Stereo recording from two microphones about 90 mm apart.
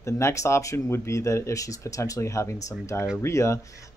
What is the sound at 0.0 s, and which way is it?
Speech, 35° left (ahead or behind).